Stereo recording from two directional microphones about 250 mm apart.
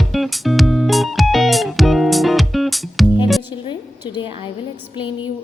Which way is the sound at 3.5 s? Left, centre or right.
Centre.